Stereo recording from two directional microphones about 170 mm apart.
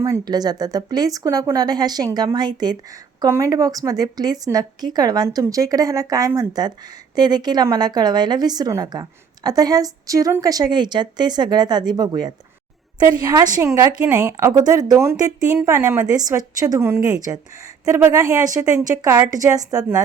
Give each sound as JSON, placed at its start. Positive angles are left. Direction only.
{"t": 0.0, "sound": "speech", "side_deg": -20}